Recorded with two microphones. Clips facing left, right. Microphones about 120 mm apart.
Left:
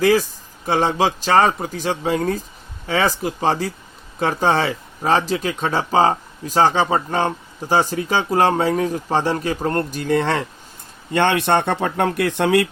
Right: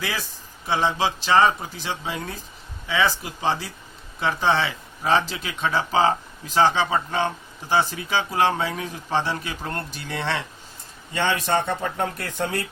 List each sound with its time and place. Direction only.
0.0 s speech: 45° left (ahead or behind)
11.1 s speech: 60° left (ahead or behind); by 12.6 s 80° left